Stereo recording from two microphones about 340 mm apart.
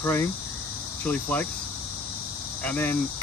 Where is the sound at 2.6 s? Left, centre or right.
Centre.